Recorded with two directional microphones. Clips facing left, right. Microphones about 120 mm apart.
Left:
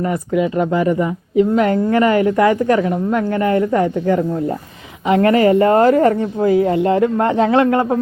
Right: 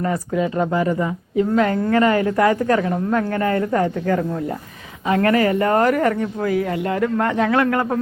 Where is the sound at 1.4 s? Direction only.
25° left (ahead or behind).